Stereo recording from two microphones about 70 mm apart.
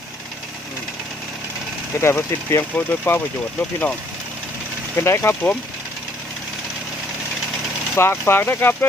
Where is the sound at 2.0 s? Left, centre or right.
Left.